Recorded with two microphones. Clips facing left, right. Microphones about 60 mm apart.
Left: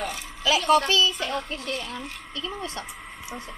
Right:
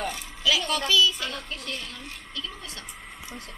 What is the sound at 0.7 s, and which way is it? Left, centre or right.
Speech, left.